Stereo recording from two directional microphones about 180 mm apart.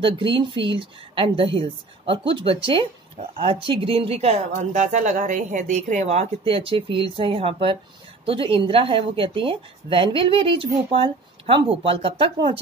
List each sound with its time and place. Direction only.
0.0 s a woman's voice: 30° right (ahead or behind)